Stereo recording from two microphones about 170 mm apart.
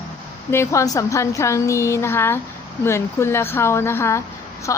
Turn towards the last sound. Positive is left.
turn(degrees=20)  # may be behind; listen again after turning